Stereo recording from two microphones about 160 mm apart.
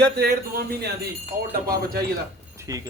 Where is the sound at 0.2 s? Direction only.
85° right.